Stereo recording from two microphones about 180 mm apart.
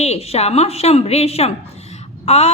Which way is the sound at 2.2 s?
35° left (ahead or behind).